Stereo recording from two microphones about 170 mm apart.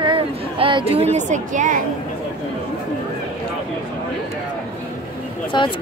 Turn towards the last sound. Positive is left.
turn(degrees=25)  # may be behind; listen again after turning